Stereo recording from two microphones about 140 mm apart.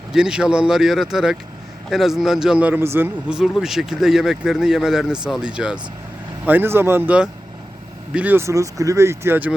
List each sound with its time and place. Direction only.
0.1 s a man's voice: 5° right (ahead or behind)